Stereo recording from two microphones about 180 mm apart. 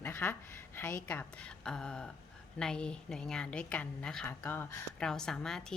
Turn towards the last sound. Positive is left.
turn(degrees=5)  # may be behind; listen again after turning